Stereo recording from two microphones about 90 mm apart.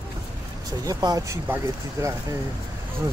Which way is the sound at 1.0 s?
40° right (ahead or behind).